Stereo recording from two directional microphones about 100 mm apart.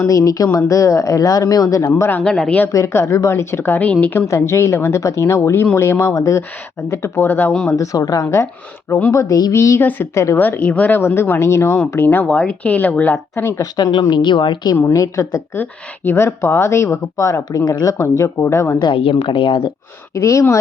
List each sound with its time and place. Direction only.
0.1 s speech: 35° left (ahead or behind)
1.8 s a woman's voice: 20° left (ahead or behind)
2.2 s speech: 10° left (ahead or behind)
2.7 s a woman's voice: 30° left (ahead or behind)
4.3 s a woman's voice: 30° left (ahead or behind)
7.7 s a woman's voice: 35° left (ahead or behind); by 13.4 s 15° left (ahead or behind)
13.4 s speech: 30° left (ahead or behind)
13.7 s speech: 40° left (ahead or behind)
14.9 s speech: 30° left (ahead or behind)
15.5 s a woman's voice: 20° left (ahead or behind)
19.3 s speech: 55° left (ahead or behind)
20.1 s speech: 30° left (ahead or behind)